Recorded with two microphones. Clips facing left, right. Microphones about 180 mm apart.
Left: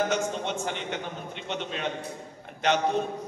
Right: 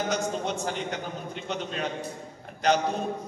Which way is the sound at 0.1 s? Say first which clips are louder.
Even; 40° right (ahead or behind).